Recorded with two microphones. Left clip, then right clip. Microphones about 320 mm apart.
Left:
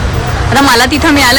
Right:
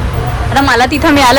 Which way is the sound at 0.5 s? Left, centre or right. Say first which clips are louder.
Left 2 dB; centre.